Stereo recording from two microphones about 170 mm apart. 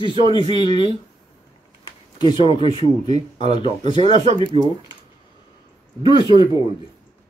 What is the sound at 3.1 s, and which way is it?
Speech, 45° right (ahead or behind).